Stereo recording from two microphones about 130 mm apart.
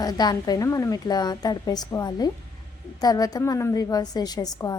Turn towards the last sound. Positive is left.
turn(degrees=30)  # may be behind; listen again after turning